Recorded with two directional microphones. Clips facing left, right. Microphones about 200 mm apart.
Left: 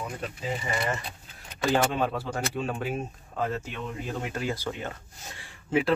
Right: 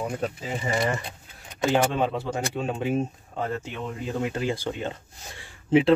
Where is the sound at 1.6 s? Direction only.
20° right (ahead or behind).